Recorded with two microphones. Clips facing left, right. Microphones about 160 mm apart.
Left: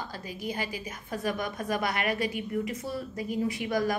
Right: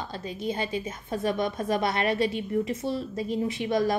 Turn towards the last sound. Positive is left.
turn(degrees=-25)  # may be behind; listen again after turning